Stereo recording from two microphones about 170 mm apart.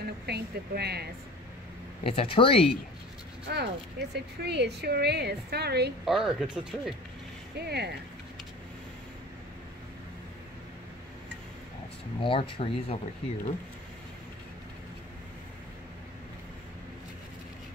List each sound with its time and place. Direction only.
0.0 s speech: 70° right (ahead or behind)
2.0 s speech: 30° left (ahead or behind)
3.4 s speech: 75° right (ahead or behind)
6.0 s speech: centre (ahead or behind)
7.5 s speech: 75° right (ahead or behind)
12.2 s speech: 30° left (ahead or behind)